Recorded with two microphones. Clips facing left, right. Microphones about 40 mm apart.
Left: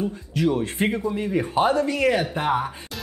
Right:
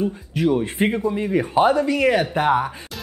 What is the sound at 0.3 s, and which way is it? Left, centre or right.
Speech, right.